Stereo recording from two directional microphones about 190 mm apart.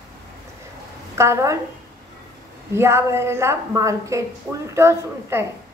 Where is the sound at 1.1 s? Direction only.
15° right (ahead or behind).